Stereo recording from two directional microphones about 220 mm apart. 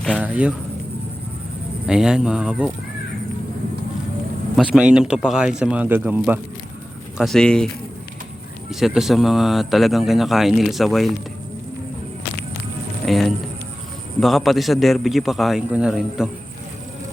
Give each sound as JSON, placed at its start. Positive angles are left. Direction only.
{"t": 0.0, "sound": "speech", "side_deg": 0}
{"t": 1.9, "sound": "speech", "side_deg": -5}
{"t": 4.5, "sound": "speech", "side_deg": -5}
{"t": 8.7, "sound": "speech", "side_deg": 0}
{"t": 13.1, "sound": "speech", "side_deg": 0}